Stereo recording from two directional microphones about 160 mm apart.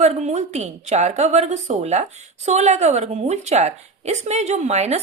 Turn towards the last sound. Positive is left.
turn(degrees=-45)  # may be behind; listen again after turning